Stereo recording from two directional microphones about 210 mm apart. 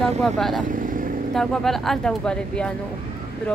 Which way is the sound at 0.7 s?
40° right (ahead or behind).